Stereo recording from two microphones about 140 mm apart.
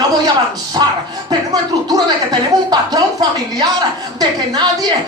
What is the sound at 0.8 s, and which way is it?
Speech, 30° right (ahead or behind).